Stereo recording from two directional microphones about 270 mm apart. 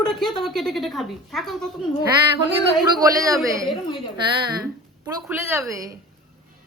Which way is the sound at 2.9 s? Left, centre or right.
Centre.